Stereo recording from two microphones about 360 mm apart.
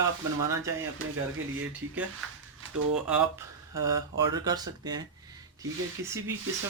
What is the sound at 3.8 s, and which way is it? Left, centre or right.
Speech, centre.